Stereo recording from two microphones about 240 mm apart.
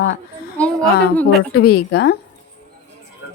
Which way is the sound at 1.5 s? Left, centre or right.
Left.